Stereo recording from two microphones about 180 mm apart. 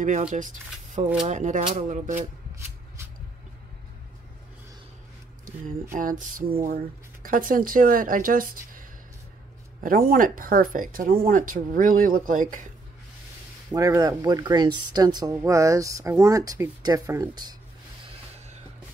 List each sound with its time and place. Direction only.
0.0 s speech: 45° right (ahead or behind)
5.9 s speech: 50° right (ahead or behind)
9.8 s speech: 50° right (ahead or behind)
13.7 s speech: 20° right (ahead or behind)